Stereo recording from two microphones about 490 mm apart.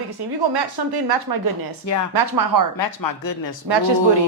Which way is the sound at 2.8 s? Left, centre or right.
Left.